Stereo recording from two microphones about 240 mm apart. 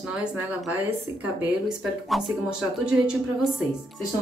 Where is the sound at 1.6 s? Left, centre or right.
Centre.